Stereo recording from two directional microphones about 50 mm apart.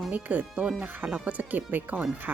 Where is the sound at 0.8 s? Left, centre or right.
Right.